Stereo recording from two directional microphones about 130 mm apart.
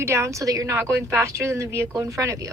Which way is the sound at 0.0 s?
20° right (ahead or behind).